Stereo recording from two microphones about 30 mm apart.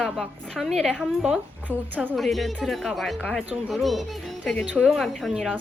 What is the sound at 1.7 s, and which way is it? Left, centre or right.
Speech, right.